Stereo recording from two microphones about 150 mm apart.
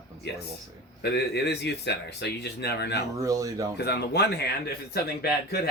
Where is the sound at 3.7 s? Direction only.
90° left.